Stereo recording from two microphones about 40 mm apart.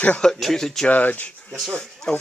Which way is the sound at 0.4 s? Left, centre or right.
Centre.